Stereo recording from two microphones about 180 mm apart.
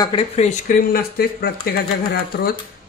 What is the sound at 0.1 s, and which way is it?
Speech, 25° left (ahead or behind).